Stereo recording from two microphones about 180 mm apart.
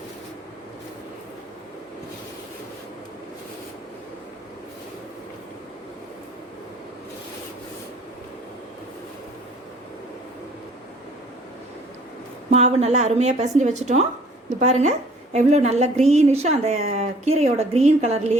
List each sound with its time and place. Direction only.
12.5 s a woman's voice: 35° right (ahead or behind)